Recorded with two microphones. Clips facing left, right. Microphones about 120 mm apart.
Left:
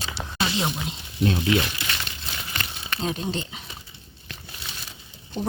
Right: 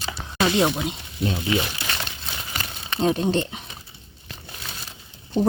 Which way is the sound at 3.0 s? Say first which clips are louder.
Right 8 dB; 55° right (ahead or behind).